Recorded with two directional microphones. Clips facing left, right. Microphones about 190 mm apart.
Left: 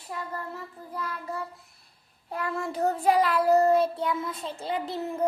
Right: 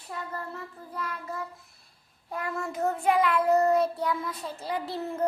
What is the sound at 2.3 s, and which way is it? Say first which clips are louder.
Child singing: left 2 dB; 30° left (ahead or behind).